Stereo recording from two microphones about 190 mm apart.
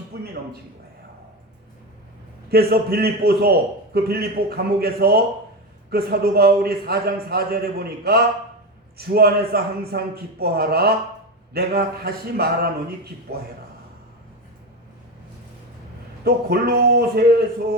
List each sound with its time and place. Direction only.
2.5 s a man's voice: 55° right (ahead or behind)
16.2 s a man's voice: 55° right (ahead or behind)